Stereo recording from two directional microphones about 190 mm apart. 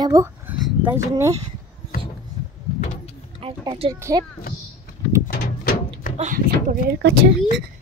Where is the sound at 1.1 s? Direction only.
15° right (ahead or behind).